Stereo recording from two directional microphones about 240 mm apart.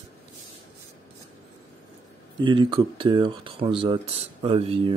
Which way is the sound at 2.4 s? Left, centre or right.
Centre.